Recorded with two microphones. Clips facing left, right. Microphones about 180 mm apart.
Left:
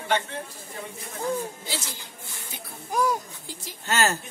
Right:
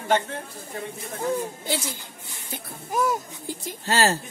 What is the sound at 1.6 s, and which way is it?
Speech, 55° right (ahead or behind).